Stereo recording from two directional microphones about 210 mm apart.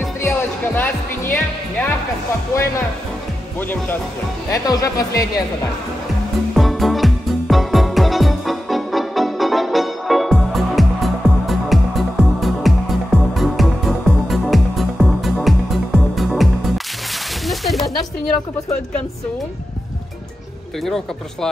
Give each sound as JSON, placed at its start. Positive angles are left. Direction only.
{"t": 0.2, "sound": "speech", "side_deg": 10}
{"t": 3.5, "sound": "speech", "side_deg": 10}
{"t": 6.5, "sound": "music", "side_deg": 0}
{"t": 17.5, "sound": "a sound", "side_deg": 0}
{"t": 20.8, "sound": "speech", "side_deg": 0}